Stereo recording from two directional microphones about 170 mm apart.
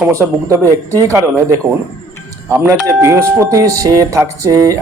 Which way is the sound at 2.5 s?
15° right (ahead or behind).